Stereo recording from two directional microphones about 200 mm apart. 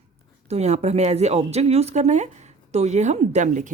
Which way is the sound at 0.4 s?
35° right (ahead or behind).